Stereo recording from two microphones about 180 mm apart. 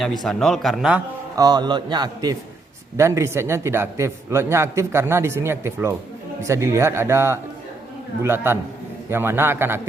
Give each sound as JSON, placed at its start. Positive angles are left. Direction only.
{"t": 0.0, "sound": "speech", "side_deg": 0}
{"t": 1.4, "sound": "a man's voice", "side_deg": -20}